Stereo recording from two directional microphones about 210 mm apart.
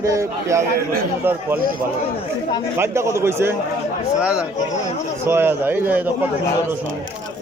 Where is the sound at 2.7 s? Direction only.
10° right (ahead or behind).